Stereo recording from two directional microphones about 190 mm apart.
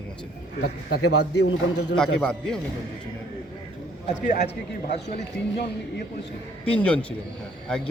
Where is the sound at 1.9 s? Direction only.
5° left (ahead or behind).